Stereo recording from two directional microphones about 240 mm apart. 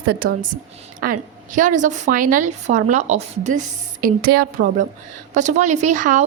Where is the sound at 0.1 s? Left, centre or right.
Right.